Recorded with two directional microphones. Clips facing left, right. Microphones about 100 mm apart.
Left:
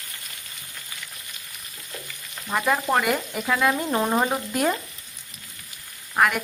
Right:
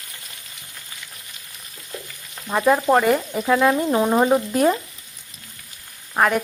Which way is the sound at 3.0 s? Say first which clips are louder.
Right 5 dB; 25° right (ahead or behind).